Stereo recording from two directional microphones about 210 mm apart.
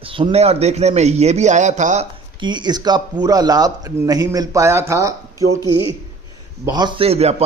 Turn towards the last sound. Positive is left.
turn(degrees=-30)  # may be behind; listen again after turning